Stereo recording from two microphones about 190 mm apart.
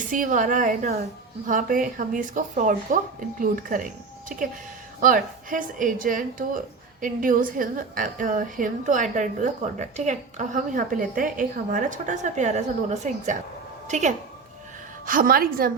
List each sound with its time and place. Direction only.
0.1 s a woman's voice: 45° right (ahead or behind)